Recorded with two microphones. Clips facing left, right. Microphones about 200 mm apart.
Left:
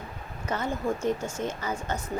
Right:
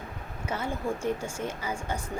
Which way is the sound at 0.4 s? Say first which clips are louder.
Left 2 dB; 10° right (ahead or behind).